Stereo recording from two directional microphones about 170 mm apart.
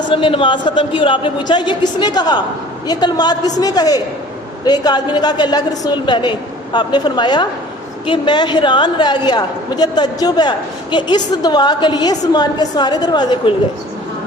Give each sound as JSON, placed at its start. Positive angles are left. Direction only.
{"t": 0.1, "sound": "a woman's voice", "side_deg": 30}